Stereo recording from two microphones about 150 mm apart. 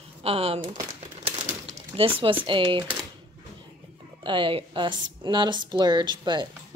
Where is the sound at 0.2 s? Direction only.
40° right (ahead or behind).